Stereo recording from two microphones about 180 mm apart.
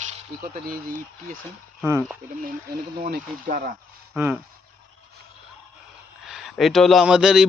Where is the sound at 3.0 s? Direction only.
50° right (ahead or behind).